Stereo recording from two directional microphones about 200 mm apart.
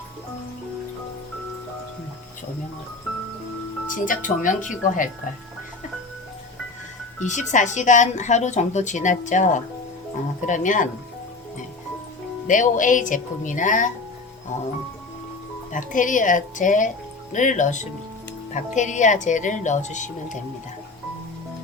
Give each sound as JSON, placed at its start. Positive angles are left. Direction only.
{"t": 3.8, "sound": "speech", "side_deg": 40}
{"t": 7.3, "sound": "speech", "side_deg": 35}
{"t": 12.5, "sound": "speech", "side_deg": 40}
{"t": 15.7, "sound": "speech", "side_deg": 40}